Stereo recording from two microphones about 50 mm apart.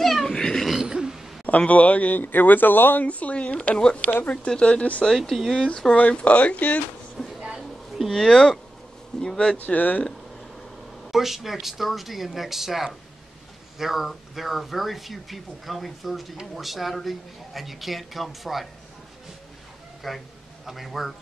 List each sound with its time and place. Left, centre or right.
0.0 s a sound: centre
0.7 s throat clearing: centre
1.7 s speech: left
3.1 s speech: left
5.0 s speech: centre
5.3 s speech: centre
5.6 s speech: centre
6.1 s speech: left
7.3 s a sound: centre
8.1 s speech: centre
9.6 s speech: left
11.1 s speech: centre
20.0 s speech: centre